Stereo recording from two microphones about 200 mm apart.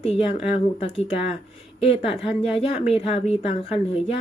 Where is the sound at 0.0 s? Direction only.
30° left (ahead or behind).